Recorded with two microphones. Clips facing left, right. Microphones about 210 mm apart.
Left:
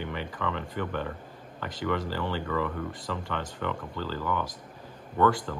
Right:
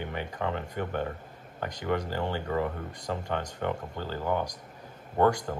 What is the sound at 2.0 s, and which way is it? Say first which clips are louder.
Speech: even; 45° right (ahead or behind).